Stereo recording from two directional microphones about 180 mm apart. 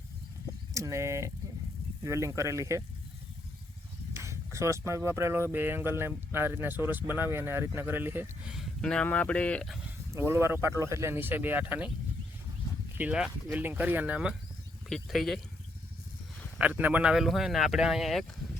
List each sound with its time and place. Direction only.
0.7 s speech: 15° right (ahead or behind)
4.1 s speech: 15° right (ahead or behind); by 9.9 s centre (ahead or behind)
10.1 s speech: 15° right (ahead or behind)
13.0 s speech: 5° right (ahead or behind)
16.6 s speech: 10° right (ahead or behind)